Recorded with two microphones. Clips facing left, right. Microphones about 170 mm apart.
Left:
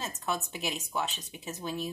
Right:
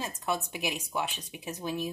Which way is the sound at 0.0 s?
10° right (ahead or behind).